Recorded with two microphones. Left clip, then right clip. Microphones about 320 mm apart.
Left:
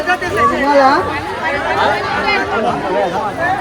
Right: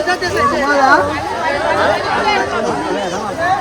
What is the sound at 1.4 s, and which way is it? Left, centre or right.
Chatter, right.